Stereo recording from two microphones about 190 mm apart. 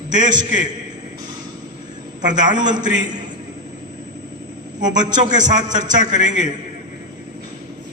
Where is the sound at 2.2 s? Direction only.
40° right (ahead or behind).